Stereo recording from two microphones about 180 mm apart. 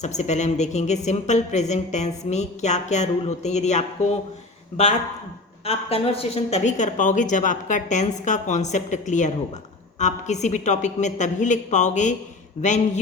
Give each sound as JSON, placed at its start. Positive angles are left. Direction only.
{"t": 0.0, "sound": "a woman's voice", "side_deg": 40}
{"t": 5.6, "sound": "a woman's voice", "side_deg": 35}